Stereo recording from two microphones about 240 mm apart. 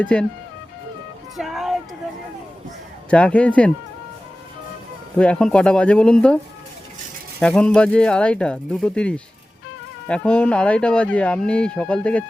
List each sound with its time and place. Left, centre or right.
0.0 s speech: centre
1.4 s a sound: centre
3.1 s speech: centre
5.1 s speech: centre